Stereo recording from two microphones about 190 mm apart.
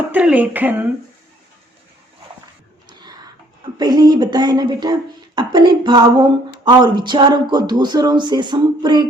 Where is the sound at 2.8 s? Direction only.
20° right (ahead or behind).